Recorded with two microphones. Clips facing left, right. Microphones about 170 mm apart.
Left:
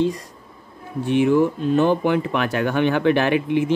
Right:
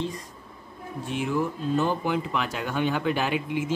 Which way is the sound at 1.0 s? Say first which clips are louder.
Left 10 dB; 65° left (ahead or behind).